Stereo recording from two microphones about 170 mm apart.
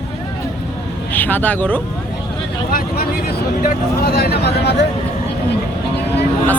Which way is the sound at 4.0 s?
65° left (ahead or behind).